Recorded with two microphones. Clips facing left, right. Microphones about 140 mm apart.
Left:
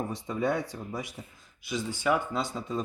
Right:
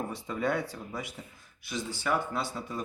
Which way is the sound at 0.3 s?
20° left (ahead or behind).